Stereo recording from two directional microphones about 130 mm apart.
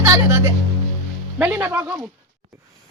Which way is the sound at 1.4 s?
15° right (ahead or behind).